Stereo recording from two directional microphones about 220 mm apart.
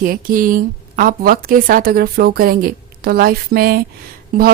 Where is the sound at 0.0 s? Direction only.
40° right (ahead or behind).